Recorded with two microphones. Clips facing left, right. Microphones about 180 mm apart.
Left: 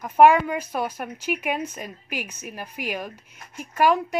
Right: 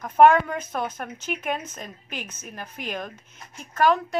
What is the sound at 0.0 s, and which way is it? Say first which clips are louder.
A woman's voice: left 1 dB; 10° left (ahead or behind).